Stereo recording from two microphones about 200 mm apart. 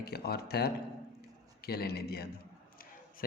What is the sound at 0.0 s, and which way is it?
A man's voice, 50° left (ahead or behind).